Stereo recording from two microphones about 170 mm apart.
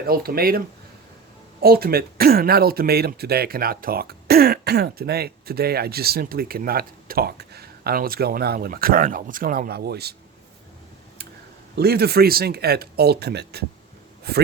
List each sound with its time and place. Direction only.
0.1 s speech: 60° right (ahead or behind)
1.6 s speech: 65° right (ahead or behind)
11.8 s speech: 70° right (ahead or behind)